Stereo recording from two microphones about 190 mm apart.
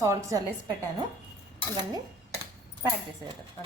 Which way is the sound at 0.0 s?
15° right (ahead or behind).